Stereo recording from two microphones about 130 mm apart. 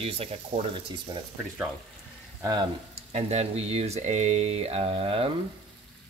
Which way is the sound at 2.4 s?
35° right (ahead or behind).